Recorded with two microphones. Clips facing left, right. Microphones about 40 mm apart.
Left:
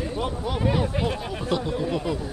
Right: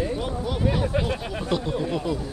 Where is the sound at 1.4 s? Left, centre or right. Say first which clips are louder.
Right 1 dB; centre.